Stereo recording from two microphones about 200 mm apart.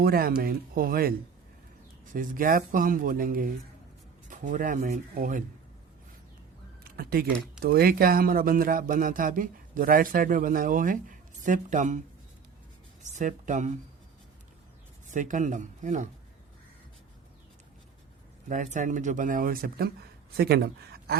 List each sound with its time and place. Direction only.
0.0 s a man's voice: 50° right (ahead or behind)
2.1 s a man's voice: 45° right (ahead or behind)
6.8 s a sound: 50° right (ahead or behind)
7.6 s a man's voice: 50° right (ahead or behind)
13.0 s speech: 35° right (ahead or behind)
15.1 s speech: 40° right (ahead or behind)
18.4 s a man's voice: 40° right (ahead or behind)